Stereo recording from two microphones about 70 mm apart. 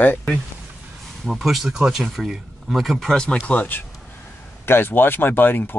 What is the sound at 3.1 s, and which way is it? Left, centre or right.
Speech, centre.